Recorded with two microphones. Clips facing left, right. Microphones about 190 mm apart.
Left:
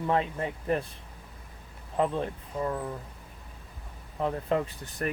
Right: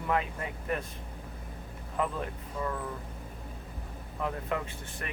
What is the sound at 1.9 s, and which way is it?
Speech, 30° left (ahead or behind).